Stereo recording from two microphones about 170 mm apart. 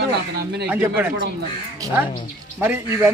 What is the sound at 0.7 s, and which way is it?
Speech, 10° right (ahead or behind).